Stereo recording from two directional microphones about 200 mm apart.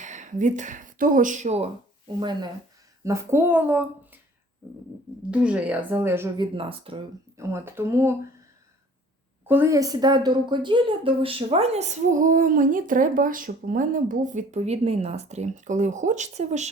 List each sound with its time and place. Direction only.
0.0 s speech: 40° right (ahead or behind)
2.1 s speech: 20° right (ahead or behind)
5.3 s speech: 5° right (ahead or behind); by 7.0 s 25° right (ahead or behind)
7.3 s speech: 10° right (ahead or behind)
9.5 s speech: 15° right (ahead or behind); by 16.6 s 35° right (ahead or behind)